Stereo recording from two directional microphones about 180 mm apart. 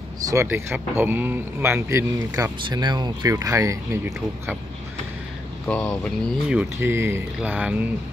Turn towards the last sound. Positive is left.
turn(degrees=-10)  # may be behind; listen again after turning